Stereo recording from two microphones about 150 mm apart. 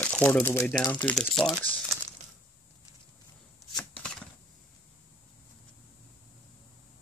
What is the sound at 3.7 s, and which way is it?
Chopping, 5° left (ahead or behind).